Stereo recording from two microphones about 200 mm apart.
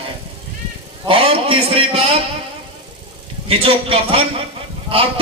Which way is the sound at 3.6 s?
25° right (ahead or behind).